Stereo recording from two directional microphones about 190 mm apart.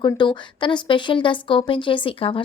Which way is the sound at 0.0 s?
25° left (ahead or behind).